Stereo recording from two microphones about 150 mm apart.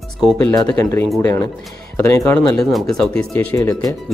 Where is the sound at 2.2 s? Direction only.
10° left (ahead or behind).